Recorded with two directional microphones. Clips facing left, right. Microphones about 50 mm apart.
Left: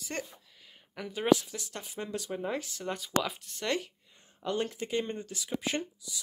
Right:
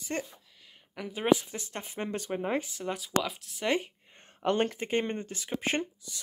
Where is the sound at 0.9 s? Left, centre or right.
Centre.